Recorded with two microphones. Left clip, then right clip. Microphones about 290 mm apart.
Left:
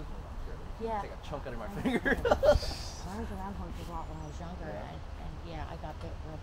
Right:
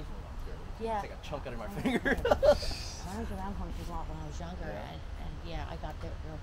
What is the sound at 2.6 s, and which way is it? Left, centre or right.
Speech, centre.